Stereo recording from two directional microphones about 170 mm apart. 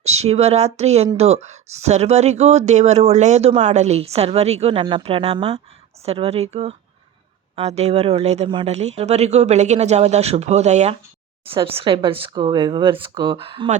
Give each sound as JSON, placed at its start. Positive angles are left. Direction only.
{"t": 0.0, "sound": "speech", "side_deg": -40}